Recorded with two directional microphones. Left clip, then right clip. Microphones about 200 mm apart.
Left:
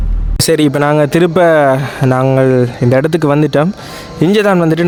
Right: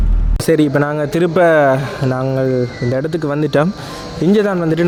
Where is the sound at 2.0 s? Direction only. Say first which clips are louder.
Left 6 dB; 25° left (ahead or behind).